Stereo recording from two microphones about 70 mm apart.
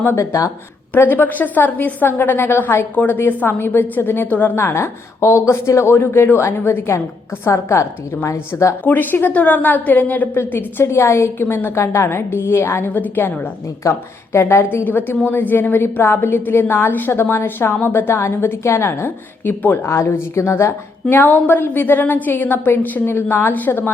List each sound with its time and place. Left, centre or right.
0.2 s speech: left
0.9 s a woman's voice: left
8.3 s speech: left
8.8 s a woman's voice: left
13.8 s speech: left
14.3 s a woman's voice: left
19.9 s a woman's voice: left